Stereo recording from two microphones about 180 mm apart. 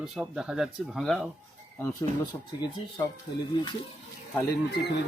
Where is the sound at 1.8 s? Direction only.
15° left (ahead or behind).